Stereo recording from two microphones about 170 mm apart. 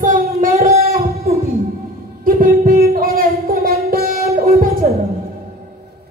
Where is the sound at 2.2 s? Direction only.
55° right (ahead or behind).